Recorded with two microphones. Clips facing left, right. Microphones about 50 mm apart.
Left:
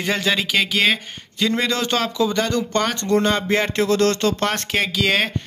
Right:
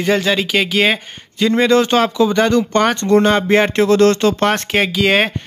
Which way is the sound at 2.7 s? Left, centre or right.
Right.